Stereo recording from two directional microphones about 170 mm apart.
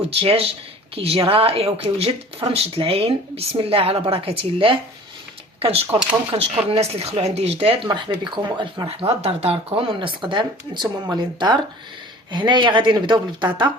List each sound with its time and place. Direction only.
0.1 s speech: 35° right (ahead or behind)
7.9 s speech: 25° right (ahead or behind)